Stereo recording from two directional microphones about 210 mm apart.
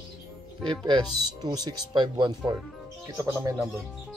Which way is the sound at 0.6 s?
20° right (ahead or behind).